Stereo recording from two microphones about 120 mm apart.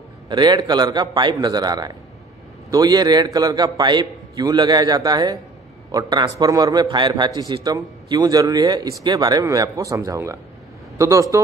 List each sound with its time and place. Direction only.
0.3 s a man's voice: 35° right (ahead or behind)